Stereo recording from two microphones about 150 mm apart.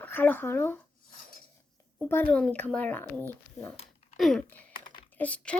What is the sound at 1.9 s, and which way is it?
Speech, 10° left (ahead or behind).